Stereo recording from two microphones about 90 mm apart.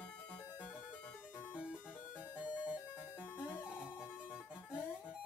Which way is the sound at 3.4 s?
20° left (ahead or behind).